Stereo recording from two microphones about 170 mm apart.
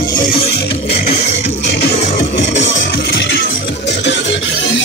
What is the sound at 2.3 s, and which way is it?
Music, 90° left.